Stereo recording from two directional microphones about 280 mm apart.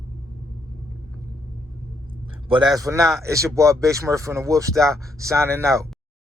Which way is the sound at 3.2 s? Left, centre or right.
Centre.